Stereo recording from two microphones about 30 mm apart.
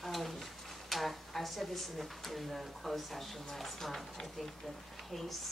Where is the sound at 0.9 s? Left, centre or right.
Centre.